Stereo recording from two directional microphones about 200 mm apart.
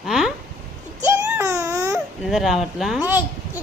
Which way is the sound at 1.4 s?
20° right (ahead or behind).